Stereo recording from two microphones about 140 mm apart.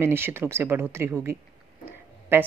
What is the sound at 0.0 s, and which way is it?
A woman's voice, 15° right (ahead or behind).